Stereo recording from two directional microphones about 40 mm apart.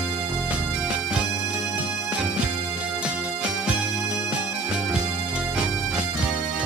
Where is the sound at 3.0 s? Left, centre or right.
Right.